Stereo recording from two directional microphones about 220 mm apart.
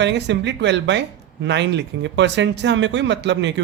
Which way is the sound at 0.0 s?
55° right (ahead or behind).